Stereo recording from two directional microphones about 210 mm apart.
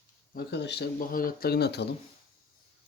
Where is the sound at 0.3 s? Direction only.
55° left (ahead or behind).